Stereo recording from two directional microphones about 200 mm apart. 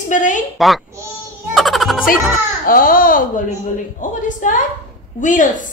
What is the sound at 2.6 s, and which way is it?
A woman's voice, 45° left (ahead or behind).